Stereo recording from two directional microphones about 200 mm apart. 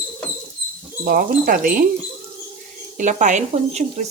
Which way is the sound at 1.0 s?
45° right (ahead or behind).